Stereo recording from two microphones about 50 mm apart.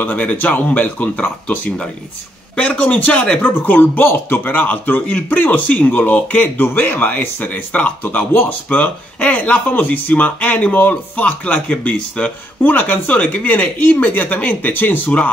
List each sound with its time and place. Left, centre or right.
0.0 s speech: left
2.5 s speech: left